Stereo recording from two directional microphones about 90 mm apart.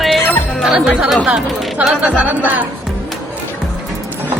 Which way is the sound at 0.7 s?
10° right (ahead or behind).